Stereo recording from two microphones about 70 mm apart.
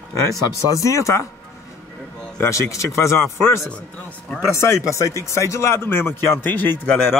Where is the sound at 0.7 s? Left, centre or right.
Left.